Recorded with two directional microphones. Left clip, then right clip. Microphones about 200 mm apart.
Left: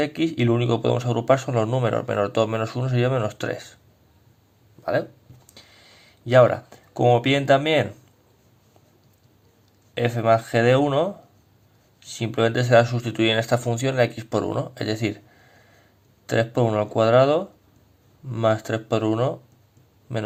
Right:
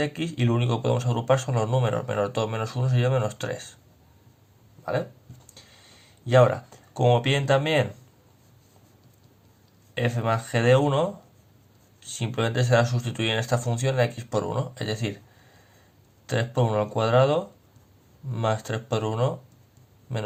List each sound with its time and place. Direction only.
0.0 s speech: 35° left (ahead or behind)
6.2 s speech: 35° left (ahead or behind)
9.9 s speech: 30° left (ahead or behind)
16.2 s a man's voice: 30° left (ahead or behind)